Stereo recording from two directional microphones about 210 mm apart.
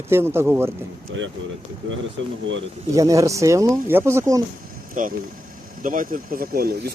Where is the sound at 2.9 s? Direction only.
15° right (ahead or behind).